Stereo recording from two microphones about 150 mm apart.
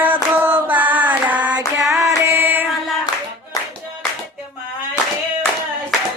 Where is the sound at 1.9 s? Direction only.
20° right (ahead or behind).